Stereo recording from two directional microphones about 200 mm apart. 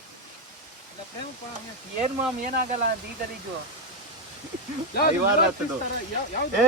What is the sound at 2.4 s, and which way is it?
Speech, 50° right (ahead or behind).